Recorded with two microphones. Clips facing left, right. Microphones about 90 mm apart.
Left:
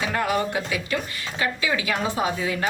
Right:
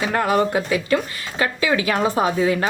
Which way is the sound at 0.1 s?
45° right (ahead or behind).